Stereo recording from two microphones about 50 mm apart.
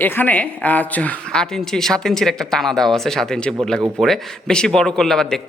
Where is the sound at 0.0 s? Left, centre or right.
Left.